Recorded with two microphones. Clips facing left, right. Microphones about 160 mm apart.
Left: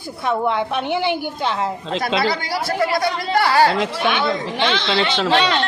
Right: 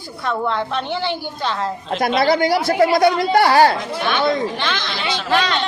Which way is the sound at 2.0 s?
45° right (ahead or behind).